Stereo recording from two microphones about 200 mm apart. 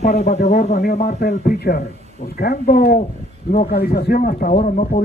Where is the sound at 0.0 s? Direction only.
55° left (ahead or behind).